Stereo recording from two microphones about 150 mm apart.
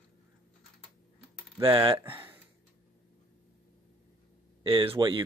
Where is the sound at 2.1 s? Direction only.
15° right (ahead or behind).